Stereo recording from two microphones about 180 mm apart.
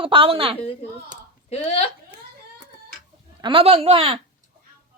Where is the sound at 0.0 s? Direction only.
30° right (ahead or behind).